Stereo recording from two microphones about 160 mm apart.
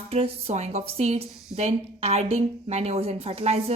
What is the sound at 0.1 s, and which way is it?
A woman's voice, 40° right (ahead or behind).